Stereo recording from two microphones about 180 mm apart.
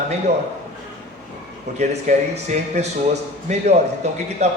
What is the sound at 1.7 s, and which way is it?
Speech, 65° right (ahead or behind).